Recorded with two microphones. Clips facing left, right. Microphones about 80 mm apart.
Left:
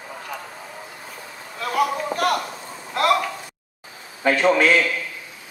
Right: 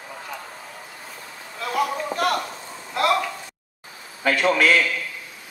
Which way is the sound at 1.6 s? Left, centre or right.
Centre.